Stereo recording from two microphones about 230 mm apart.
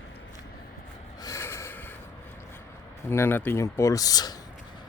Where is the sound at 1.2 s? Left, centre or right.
Centre.